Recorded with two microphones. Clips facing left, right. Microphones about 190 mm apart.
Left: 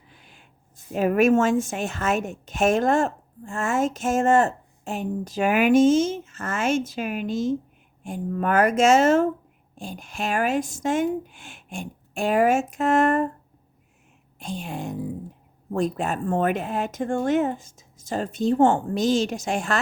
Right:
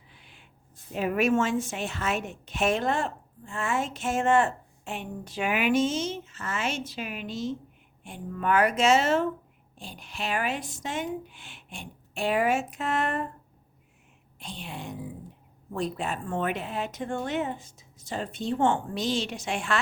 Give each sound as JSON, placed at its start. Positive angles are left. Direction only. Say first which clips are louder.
{"t": 0.1, "sound": "a sound", "louder": "left 3 dB", "side_deg": 45}
{"t": 0.9, "sound": "a woman's voice", "louder": "left 6 dB", "side_deg": 45}
{"t": 14.3, "sound": "a woman's voice", "louder": "left 8 dB", "side_deg": 45}